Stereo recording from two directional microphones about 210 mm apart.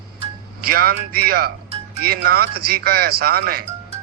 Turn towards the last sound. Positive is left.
turn(degrees=-45)  # may be behind; listen again after turning